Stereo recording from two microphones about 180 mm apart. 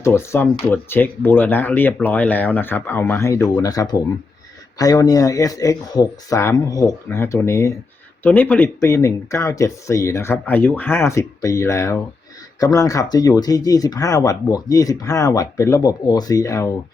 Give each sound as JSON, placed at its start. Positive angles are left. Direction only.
{"t": 0.0, "sound": "speech", "side_deg": 15}